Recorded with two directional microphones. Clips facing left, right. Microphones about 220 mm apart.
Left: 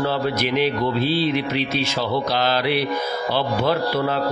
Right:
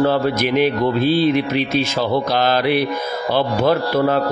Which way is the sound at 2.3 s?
50° right (ahead or behind).